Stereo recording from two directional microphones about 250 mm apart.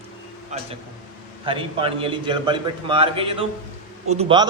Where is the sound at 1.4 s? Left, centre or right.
Right.